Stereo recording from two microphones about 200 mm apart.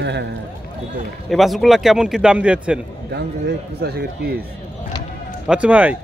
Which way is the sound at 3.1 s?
55° right (ahead or behind).